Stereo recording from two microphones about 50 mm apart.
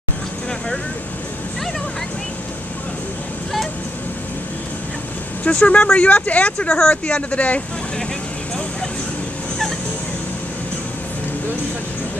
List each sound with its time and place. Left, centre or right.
5.4 s speech: left